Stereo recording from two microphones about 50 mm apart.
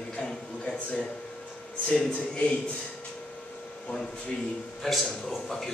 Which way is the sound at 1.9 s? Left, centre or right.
Left.